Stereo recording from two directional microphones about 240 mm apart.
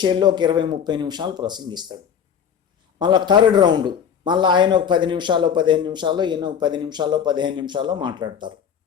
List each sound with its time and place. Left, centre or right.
0.0 s speech: centre
3.0 s speech: centre